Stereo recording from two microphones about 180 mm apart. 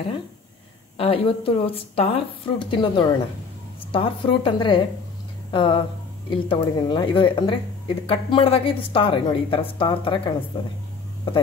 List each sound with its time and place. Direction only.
0.9 s speech: 30° left (ahead or behind)